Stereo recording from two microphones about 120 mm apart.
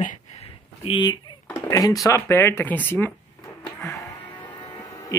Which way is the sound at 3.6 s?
25° left (ahead or behind).